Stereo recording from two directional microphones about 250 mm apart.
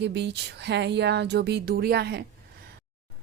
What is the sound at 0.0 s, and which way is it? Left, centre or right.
Speech, right.